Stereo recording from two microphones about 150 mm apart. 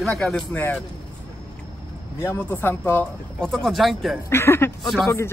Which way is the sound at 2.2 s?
15° left (ahead or behind).